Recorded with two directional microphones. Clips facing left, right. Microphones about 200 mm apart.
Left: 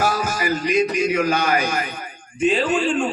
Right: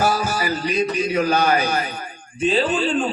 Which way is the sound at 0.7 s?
35° right (ahead or behind).